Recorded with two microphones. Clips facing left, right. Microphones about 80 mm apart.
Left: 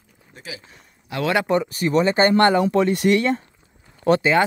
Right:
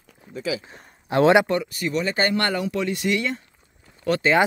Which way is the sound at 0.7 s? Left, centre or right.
Right.